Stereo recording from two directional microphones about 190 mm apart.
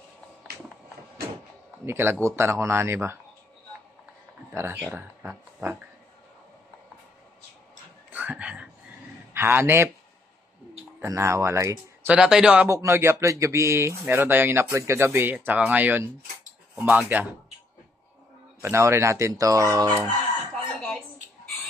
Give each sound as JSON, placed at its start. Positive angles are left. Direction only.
{"t": 1.9, "sound": "speech", "side_deg": -10}
{"t": 4.5, "sound": "speech", "side_deg": -15}
{"t": 8.1, "sound": "whispering", "side_deg": -10}
{"t": 9.3, "sound": "a man's voice", "side_deg": -10}
{"t": 11.0, "sound": "speech", "side_deg": -15}
{"t": 12.2, "sound": "speech", "side_deg": -5}
{"t": 18.6, "sound": "speech", "side_deg": -15}